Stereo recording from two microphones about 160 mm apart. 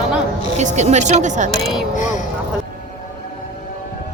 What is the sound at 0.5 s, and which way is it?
Speech, 45° right (ahead or behind).